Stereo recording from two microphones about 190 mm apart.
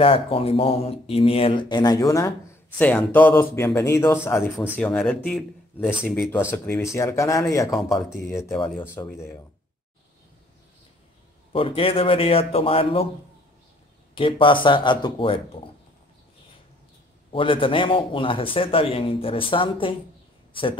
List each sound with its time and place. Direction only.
0.0 s a man's voice: 30° left (ahead or behind); by 6.3 s centre (ahead or behind)
6.3 s a man's voice: 10° left (ahead or behind)
8.7 s a man's voice: 10° left (ahead or behind)
11.5 s speech: 30° left (ahead or behind)
14.1 s speech: 25° left (ahead or behind)
17.3 s speech: 25° left (ahead or behind)